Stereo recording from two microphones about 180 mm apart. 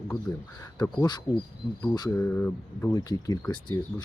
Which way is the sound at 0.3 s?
20° left (ahead or behind).